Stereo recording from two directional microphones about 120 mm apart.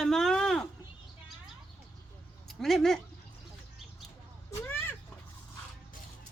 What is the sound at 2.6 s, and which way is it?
Speech, centre (ahead or behind).